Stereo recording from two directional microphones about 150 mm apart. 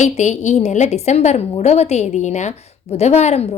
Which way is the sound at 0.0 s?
50° left (ahead or behind).